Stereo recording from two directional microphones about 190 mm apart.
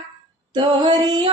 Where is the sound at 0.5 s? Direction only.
25° right (ahead or behind).